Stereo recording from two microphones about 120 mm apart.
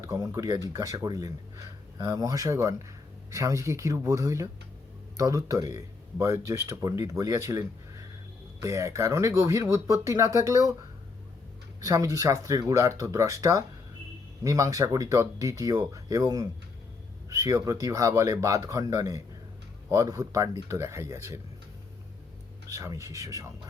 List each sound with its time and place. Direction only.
0.0 s speech: 25° right (ahead or behind)
11.8 s speech: 30° right (ahead or behind)
22.7 s speech: 25° right (ahead or behind)